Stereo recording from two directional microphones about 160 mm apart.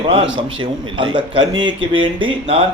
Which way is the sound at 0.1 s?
30° right (ahead or behind).